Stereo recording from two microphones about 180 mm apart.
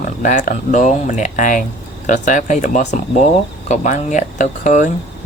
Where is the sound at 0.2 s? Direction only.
45° left (ahead or behind).